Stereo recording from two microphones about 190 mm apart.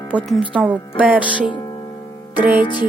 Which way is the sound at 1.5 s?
25° left (ahead or behind).